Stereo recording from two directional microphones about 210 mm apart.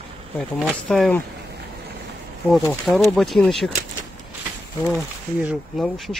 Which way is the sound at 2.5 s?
Centre (ahead or behind).